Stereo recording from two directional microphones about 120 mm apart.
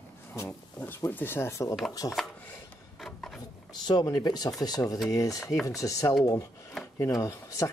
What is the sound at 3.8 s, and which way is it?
Speech, 35° left (ahead or behind).